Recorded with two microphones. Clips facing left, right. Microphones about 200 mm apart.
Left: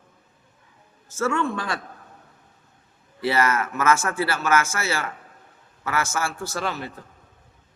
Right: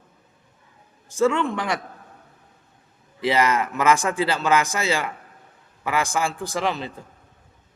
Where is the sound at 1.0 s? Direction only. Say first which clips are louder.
Right 4 dB; 15° right (ahead or behind).